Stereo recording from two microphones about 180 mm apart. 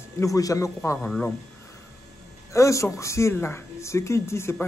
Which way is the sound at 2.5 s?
15° left (ahead or behind).